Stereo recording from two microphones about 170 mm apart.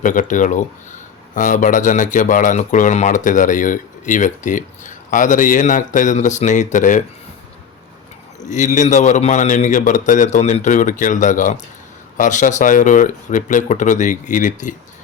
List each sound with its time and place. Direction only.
0.0 s speech: 50° left (ahead or behind)
8.4 s speech: 45° left (ahead or behind)